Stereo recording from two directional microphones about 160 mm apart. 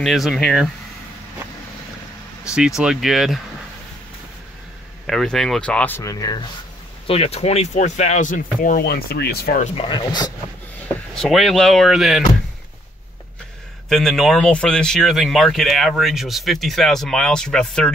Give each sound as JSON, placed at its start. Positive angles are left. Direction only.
{"t": 0.0, "sound": "speech", "side_deg": 0}
{"t": 2.8, "sound": "speech", "side_deg": 0}
{"t": 5.0, "sound": "speech", "side_deg": 5}
{"t": 7.1, "sound": "speech", "side_deg": 40}
{"t": 9.8, "sound": "speech", "side_deg": 30}
{"t": 11.1, "sound": "speech", "side_deg": 0}
{"t": 13.8, "sound": "speech", "side_deg": 0}